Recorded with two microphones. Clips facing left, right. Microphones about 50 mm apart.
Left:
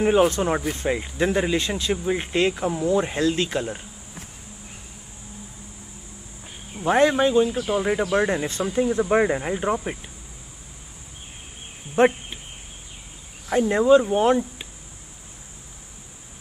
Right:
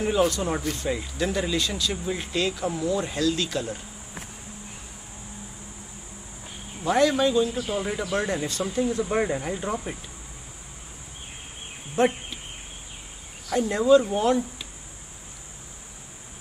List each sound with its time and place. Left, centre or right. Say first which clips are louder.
0.0 s speech: left 5 dB; left
6.8 s speech: left 3 dB; left
12.0 s speech: left 4 dB; left
13.5 s speech: left 2 dB; left